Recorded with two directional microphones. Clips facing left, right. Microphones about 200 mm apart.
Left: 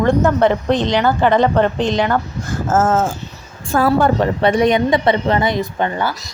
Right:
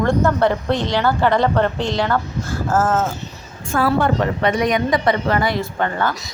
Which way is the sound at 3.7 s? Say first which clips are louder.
Left 3 dB; 40° left (ahead or behind).